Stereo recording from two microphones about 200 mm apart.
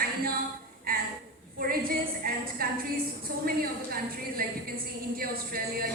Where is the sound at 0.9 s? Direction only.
50° right (ahead or behind).